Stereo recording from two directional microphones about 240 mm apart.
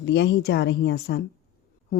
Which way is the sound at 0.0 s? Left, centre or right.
Left.